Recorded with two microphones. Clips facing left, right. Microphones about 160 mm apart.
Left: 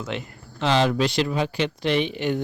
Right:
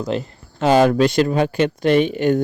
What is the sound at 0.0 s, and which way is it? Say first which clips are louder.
Speech: right 8 dB; 35° right (ahead or behind).